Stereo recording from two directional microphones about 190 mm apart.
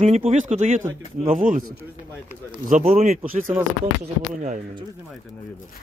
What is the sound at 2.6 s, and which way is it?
Speech, 45° right (ahead or behind).